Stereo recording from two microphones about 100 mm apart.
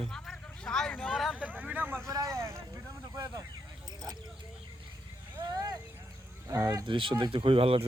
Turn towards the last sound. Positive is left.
turn(degrees=-70)  # may be behind; listen again after turning